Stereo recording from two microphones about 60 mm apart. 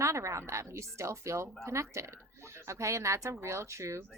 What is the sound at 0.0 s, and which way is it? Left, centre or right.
Speech, right.